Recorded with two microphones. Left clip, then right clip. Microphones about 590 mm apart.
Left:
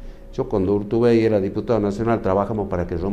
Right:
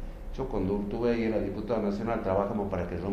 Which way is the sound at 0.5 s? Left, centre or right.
Left.